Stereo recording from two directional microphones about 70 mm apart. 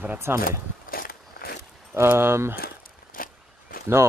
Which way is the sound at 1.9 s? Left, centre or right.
Right.